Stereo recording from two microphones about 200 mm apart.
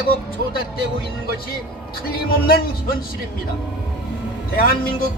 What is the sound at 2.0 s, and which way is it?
Speech, 45° left (ahead or behind).